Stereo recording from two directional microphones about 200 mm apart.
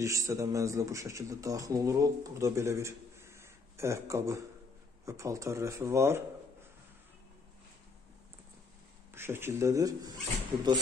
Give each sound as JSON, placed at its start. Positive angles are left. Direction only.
{"t": 0.0, "sound": "speech", "side_deg": -15}
{"t": 9.1, "sound": "speech", "side_deg": -10}